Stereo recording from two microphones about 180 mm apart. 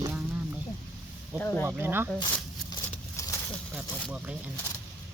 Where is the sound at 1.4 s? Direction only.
10° left (ahead or behind).